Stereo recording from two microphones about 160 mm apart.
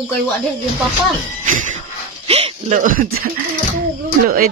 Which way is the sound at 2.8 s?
60° right (ahead or behind).